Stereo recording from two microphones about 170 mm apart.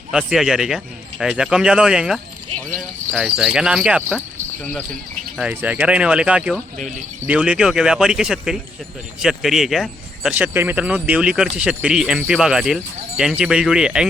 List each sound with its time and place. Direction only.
0.1 s speech: 5° right (ahead or behind)
5.4 s speech: 10° right (ahead or behind)
6.7 s speech: 45° right (ahead or behind)
7.3 s speech: 5° right (ahead or behind)